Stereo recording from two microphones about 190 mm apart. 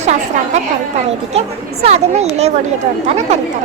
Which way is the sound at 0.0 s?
35° right (ahead or behind).